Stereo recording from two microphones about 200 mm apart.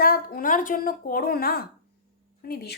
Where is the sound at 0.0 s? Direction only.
50° left (ahead or behind).